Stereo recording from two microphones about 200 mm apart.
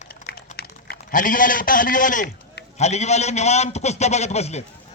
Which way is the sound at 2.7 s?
35° left (ahead or behind).